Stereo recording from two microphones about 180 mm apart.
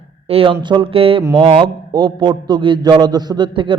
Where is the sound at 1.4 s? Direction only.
30° right (ahead or behind).